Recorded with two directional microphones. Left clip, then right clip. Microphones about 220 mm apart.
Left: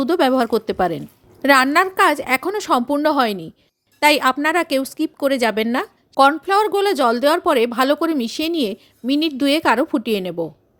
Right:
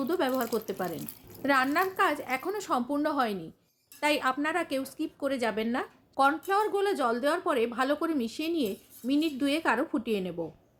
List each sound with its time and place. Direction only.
0.0 s a woman's voice: 45° left (ahead or behind)